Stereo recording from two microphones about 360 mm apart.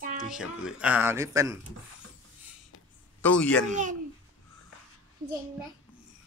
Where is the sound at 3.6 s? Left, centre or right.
Right.